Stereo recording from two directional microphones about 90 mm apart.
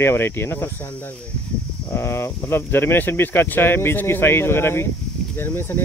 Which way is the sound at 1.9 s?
25° left (ahead or behind).